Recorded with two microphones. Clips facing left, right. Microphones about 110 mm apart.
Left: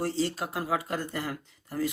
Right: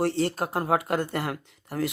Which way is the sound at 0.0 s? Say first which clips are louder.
Right 4 dB; 60° right (ahead or behind).